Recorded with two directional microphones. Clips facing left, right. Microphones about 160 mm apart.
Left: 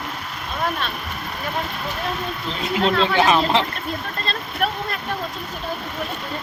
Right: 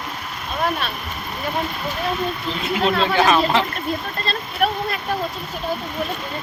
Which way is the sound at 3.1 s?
20° left (ahead or behind).